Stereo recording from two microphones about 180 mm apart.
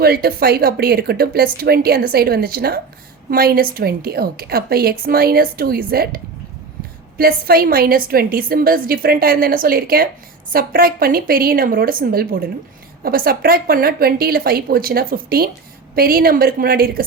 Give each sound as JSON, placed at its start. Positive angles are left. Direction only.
{"t": 0.0, "sound": "a woman's voice", "side_deg": -60}
{"t": 7.2, "sound": "a woman's voice", "side_deg": -55}